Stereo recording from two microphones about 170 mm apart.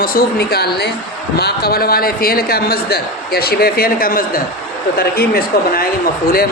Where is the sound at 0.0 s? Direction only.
60° left (ahead or behind).